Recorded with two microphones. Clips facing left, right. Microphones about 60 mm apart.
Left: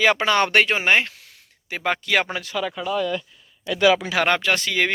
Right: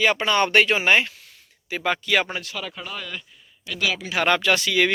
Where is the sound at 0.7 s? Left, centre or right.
Left.